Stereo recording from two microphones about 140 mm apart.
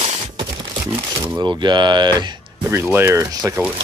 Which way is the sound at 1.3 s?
30° right (ahead or behind).